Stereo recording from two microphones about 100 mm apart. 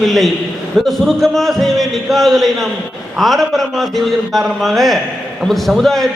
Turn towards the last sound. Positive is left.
turn(degrees=0)  # may be behind; listen again after turning